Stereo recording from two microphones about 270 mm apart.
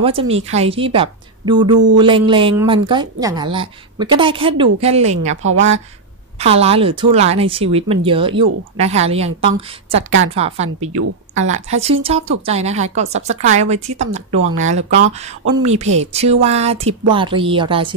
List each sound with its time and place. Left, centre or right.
0.0 s a woman's voice: right
6.4 s a woman's voice: right
10.3 s a woman's voice: right
11.0 s speech: right
11.4 s a woman's voice: right